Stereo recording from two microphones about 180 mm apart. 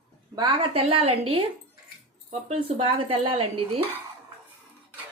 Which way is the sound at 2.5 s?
30° right (ahead or behind).